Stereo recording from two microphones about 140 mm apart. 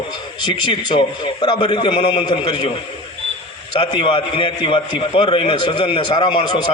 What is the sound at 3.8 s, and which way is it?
A man's voice, 35° left (ahead or behind).